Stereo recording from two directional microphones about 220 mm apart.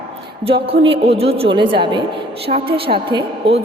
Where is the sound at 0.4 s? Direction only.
25° right (ahead or behind).